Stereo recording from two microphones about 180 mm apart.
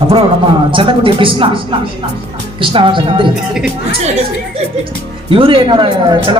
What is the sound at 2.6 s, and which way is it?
Speech, 30° right (ahead or behind).